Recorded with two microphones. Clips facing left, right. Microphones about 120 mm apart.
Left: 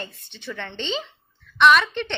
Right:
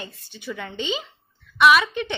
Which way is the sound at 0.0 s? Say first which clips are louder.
Even; 5° right (ahead or behind).